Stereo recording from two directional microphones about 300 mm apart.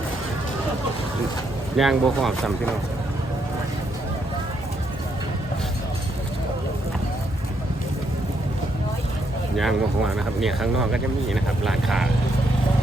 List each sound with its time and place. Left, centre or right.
1.7 s speech: centre
9.6 s speech: centre